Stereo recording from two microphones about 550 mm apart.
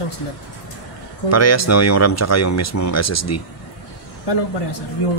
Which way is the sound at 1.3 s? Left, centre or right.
Left.